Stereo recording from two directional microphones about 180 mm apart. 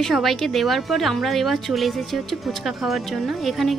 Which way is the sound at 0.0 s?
Centre (ahead or behind).